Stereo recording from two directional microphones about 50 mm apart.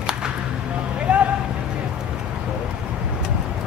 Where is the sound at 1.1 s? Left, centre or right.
Centre.